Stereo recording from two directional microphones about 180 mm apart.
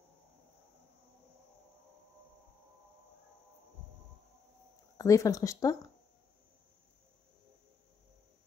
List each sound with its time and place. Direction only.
4.9 s speech: 20° left (ahead or behind)